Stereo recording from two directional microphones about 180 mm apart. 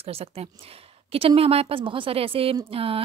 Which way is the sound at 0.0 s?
35° right (ahead or behind).